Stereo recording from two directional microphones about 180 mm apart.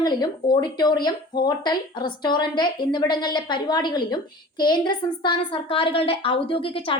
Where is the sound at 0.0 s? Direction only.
25° left (ahead or behind).